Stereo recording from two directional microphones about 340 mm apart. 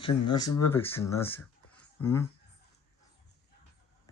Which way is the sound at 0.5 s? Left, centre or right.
Centre.